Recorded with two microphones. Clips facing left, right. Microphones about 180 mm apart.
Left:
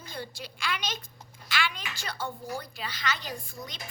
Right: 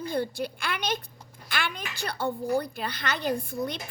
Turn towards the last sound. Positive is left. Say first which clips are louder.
# right 11 dB
turn(degrees=-60)  # may be behind; listen again after turning